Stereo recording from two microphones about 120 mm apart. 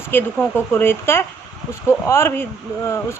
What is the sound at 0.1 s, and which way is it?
A woman's voice, 20° left (ahead or behind).